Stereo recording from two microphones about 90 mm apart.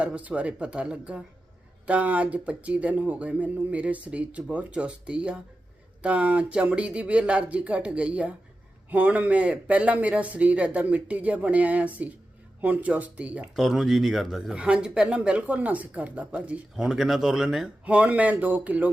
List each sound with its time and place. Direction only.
0.0 s speech: 15° right (ahead or behind)
13.6 s speech: 5° right (ahead or behind)
17.9 s speech: 15° right (ahead or behind)